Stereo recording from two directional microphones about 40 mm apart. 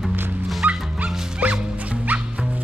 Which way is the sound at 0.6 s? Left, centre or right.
Right.